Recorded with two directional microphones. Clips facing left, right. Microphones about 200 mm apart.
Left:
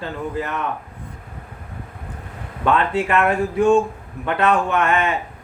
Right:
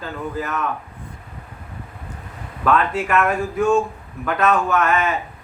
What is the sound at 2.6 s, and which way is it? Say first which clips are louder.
A man's voice: even; 30° left (ahead or behind).